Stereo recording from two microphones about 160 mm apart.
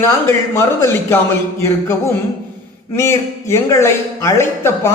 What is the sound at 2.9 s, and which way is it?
A man's voice, 15° left (ahead or behind).